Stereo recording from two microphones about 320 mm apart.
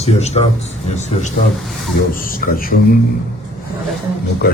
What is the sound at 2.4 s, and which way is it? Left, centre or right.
Speech, left.